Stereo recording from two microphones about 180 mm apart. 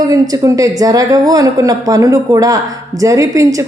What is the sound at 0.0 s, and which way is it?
A woman's voice, 20° right (ahead or behind).